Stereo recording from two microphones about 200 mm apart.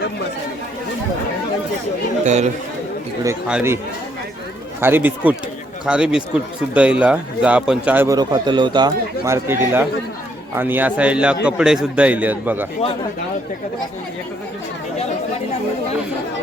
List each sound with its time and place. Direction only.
2.2 s speech: 35° right (ahead or behind)
3.2 s a man's voice: 10° right (ahead or behind)
4.8 s a man's voice: 10° right (ahead or behind)